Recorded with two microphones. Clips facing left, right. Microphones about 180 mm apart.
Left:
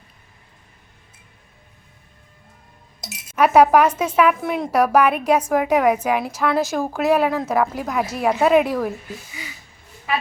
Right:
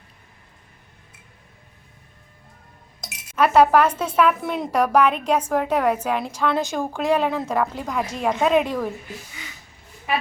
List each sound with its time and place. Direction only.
3.0 s speech: 10° left (ahead or behind)